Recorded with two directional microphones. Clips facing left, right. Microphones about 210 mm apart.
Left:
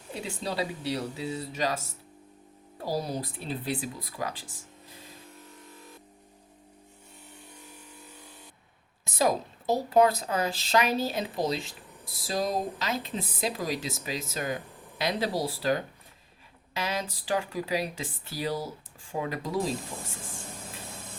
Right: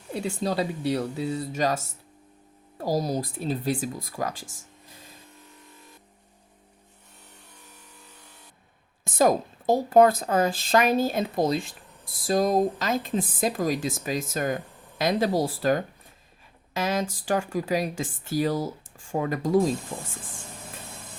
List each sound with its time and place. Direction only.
0.2 s a woman's voice: 45° right (ahead or behind)
2.8 s a woman's voice: 40° right (ahead or behind)
9.0 s a woman's voice: 50° right (ahead or behind)